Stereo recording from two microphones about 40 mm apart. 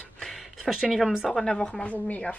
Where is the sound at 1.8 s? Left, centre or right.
Left.